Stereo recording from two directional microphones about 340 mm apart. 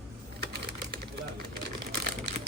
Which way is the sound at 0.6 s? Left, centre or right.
Right.